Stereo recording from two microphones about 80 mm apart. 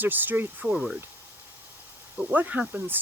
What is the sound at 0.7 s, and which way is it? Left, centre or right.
Speech, centre.